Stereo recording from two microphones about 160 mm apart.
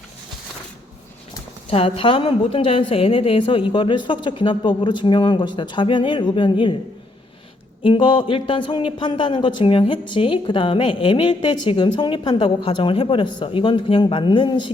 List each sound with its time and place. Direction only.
1.7 s a man's voice: 35° left (ahead or behind)
7.9 s a man's voice: 30° left (ahead or behind)